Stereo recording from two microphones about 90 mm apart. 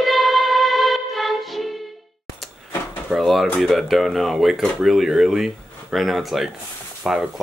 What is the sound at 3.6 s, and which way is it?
Speech, centre (ahead or behind).